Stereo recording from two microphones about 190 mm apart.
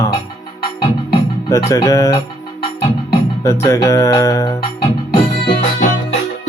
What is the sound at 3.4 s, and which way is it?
Music, 15° left (ahead or behind).